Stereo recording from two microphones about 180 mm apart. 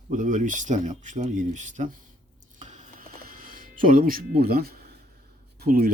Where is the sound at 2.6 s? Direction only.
40° right (ahead or behind); by 5.0 s 60° right (ahead or behind).